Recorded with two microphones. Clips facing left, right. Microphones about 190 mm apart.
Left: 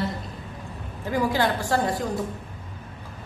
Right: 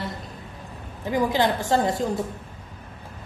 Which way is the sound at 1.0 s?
20° right (ahead or behind).